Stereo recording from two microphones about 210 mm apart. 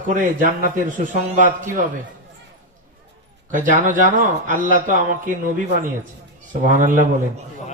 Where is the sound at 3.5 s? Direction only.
40° right (ahead or behind).